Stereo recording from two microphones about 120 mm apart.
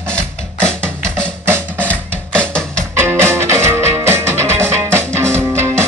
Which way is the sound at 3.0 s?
20° right (ahead or behind).